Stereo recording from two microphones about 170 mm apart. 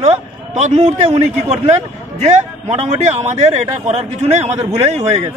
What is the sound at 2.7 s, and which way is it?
A man's voice, 45° right (ahead or behind).